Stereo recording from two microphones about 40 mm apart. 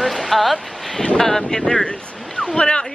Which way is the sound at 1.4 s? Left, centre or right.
Left.